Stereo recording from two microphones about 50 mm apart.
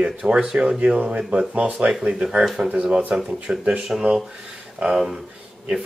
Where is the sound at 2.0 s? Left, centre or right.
Centre.